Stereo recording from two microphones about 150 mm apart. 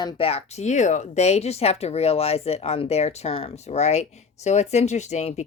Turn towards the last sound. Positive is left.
turn(degrees=50)  # may be behind; listen again after turning